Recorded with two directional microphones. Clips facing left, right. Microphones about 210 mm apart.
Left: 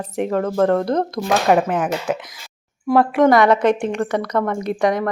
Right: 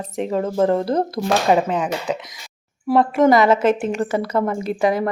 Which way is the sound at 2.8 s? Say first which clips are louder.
Left 1 dB; centre (ahead or behind).